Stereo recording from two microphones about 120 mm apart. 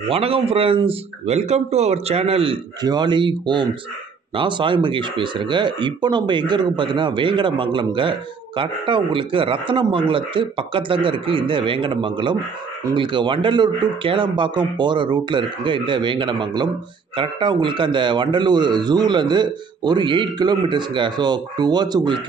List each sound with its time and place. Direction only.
0.1 s speech: 55° right (ahead or behind)
2.8 s a man's voice: 35° right (ahead or behind)